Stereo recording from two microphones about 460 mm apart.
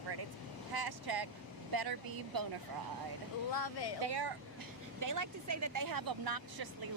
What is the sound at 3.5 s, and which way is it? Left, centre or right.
Speech, left.